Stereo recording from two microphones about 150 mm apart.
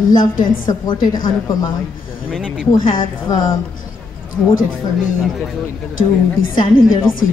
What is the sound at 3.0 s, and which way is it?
Speech, 30° left (ahead or behind).